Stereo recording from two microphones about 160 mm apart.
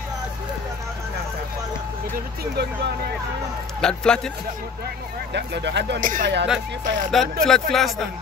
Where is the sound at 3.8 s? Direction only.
5° left (ahead or behind).